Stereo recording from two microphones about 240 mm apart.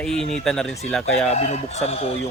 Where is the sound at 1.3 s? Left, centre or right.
Left.